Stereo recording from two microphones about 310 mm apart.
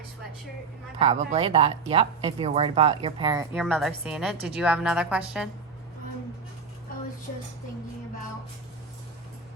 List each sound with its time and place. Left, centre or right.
0.9 s speech: right
3.6 s a woman's voice: centre